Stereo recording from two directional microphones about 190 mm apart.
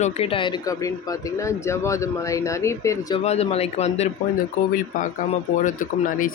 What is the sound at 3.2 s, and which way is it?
Speech, 35° left (ahead or behind).